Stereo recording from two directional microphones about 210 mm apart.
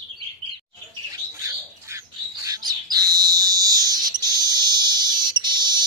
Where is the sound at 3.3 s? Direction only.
20° right (ahead or behind).